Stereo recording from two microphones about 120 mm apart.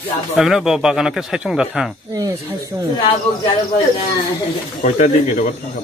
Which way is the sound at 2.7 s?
30° right (ahead or behind).